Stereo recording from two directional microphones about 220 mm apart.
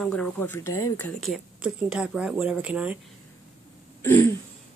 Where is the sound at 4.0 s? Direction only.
10° left (ahead or behind).